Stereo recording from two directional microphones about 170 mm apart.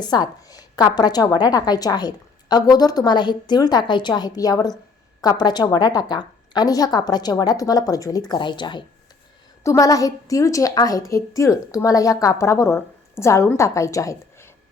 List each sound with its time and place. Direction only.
0.0 s a woman's voice: 25° left (ahead or behind)